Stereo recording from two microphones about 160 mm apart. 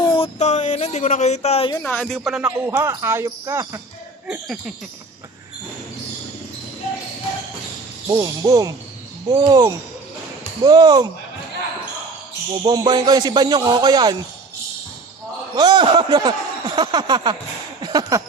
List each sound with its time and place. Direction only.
0.0 s a sound: 30° left (ahead or behind)
0.3 s speech: 45° left (ahead or behind)
1.8 s a man's voice: 10° left (ahead or behind)
2.5 s speech: 15° right (ahead or behind)
4.3 s a man's voice: 5° right (ahead or behind)
8.2 s speech: 20° right (ahead or behind)
12.6 s speech: 25° right (ahead or behind)
15.5 s speech: 25° right (ahead or behind)
17.8 s a sound: 25° right (ahead or behind)